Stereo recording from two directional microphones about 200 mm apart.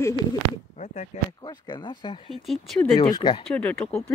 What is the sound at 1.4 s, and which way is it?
Speech, 20° left (ahead or behind).